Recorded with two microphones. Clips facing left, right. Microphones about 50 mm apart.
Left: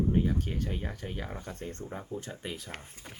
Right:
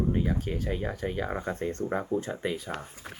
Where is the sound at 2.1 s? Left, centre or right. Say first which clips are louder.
Right 9 dB; right.